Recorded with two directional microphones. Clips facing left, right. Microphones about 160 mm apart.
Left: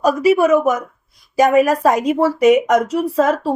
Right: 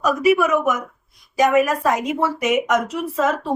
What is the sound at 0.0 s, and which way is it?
Speech, 35° left (ahead or behind).